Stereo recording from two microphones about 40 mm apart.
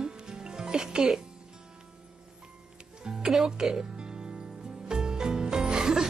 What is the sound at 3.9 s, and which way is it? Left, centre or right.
Music, right.